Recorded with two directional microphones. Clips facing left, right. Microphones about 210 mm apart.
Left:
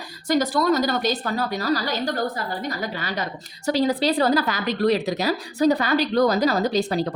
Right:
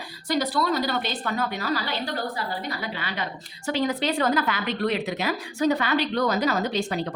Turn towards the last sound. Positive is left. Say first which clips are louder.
# left 5 dB
turn(degrees=35)  # may be behind; listen again after turning